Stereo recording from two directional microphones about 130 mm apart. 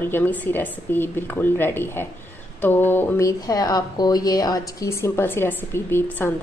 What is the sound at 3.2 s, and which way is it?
A woman's voice, 30° left (ahead or behind).